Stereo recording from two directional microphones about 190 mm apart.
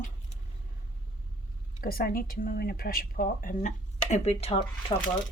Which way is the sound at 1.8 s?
50° left (ahead or behind).